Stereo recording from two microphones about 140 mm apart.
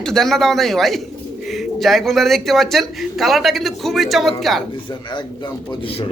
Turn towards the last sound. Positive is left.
turn(degrees=0)  # may be behind; listen again after turning